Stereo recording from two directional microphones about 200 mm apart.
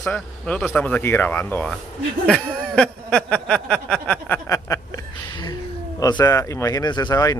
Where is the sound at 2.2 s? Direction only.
5° left (ahead or behind).